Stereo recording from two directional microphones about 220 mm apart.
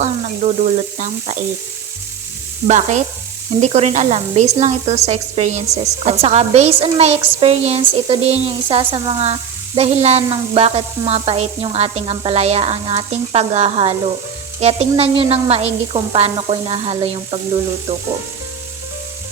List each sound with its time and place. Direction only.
0.0 s frying: 30° right (ahead or behind)
2.6 s a woman's voice: 35° right (ahead or behind)